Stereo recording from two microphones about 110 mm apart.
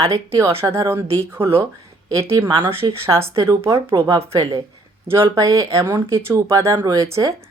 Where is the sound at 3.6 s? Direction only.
40° right (ahead or behind).